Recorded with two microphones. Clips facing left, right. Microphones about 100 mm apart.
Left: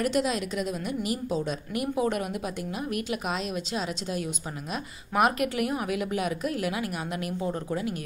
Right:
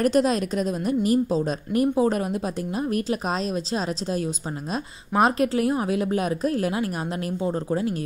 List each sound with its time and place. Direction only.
0.0 s a woman's voice: 40° right (ahead or behind)